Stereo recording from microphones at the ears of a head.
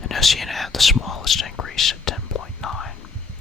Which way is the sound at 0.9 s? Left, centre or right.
Left.